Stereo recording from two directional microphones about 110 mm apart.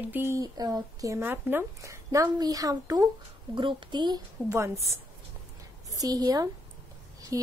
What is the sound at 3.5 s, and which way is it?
Speech, 50° right (ahead or behind).